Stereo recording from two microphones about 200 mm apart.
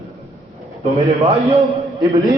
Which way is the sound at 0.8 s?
30° right (ahead or behind).